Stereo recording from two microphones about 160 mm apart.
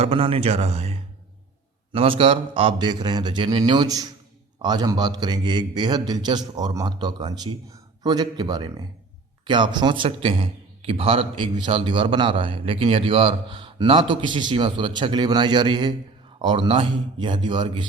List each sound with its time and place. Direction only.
0.0 s a man's voice: 35° right (ahead or behind)